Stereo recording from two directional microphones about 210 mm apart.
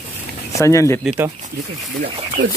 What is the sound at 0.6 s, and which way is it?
Speech, 15° left (ahead or behind).